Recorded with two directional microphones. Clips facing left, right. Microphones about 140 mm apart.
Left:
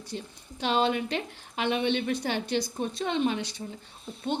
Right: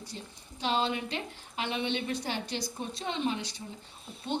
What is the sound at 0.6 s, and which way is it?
A woman's voice, 60° left (ahead or behind).